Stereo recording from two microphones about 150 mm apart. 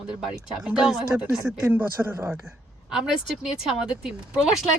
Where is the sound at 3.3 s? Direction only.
Centre (ahead or behind).